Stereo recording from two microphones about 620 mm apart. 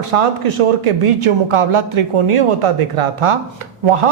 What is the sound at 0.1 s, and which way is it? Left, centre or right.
A man's voice, right.